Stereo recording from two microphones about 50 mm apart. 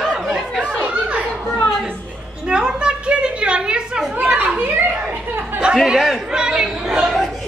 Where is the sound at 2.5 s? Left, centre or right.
Centre.